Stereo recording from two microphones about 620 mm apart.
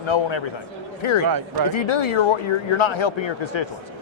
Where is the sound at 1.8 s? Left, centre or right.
Left.